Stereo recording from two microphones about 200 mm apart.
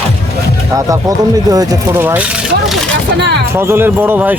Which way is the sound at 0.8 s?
15° right (ahead or behind).